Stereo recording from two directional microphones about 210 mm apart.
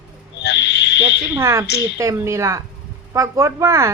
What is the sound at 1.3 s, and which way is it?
Speech, 10° right (ahead or behind).